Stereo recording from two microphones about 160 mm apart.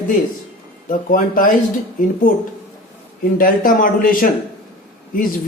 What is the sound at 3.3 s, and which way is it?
A man's voice, 60° left (ahead or behind).